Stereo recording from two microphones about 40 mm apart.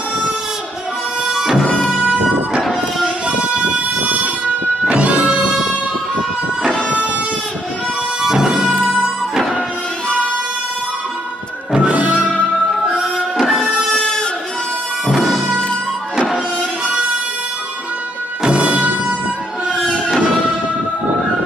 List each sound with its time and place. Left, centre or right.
1.2 s music: centre
1.6 s music: left
1.9 s music: right
2.6 s music: centre
4.0 s vehicle: right
4.8 s music: right
8.2 s music: centre
11.7 s music: right
12.8 s music: centre
13.4 s music: centre
13.9 s a sound: centre
15.2 s music: centre
16.8 s harmonica: right
18.4 s music: right